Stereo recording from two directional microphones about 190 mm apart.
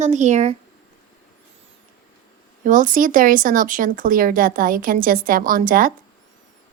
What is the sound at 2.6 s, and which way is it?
Speech, 45° right (ahead or behind).